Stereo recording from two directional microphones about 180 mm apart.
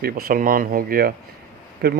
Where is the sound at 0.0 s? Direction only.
55° right (ahead or behind).